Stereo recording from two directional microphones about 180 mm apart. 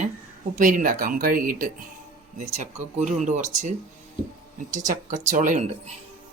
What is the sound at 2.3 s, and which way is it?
Speech, 40° right (ahead or behind).